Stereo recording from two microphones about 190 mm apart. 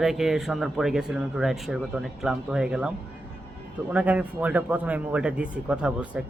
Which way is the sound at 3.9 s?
10° right (ahead or behind).